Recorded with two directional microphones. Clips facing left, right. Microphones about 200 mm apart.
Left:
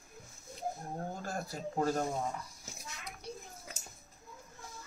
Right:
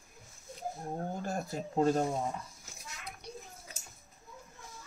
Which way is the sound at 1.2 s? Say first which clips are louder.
Right 3 dB; 20° right (ahead or behind).